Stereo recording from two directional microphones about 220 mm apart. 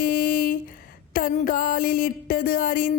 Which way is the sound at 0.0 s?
40° left (ahead or behind).